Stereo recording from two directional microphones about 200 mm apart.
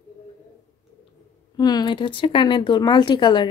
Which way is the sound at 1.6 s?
20° left (ahead or behind).